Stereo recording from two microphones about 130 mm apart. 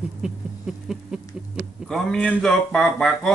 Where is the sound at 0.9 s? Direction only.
5° right (ahead or behind).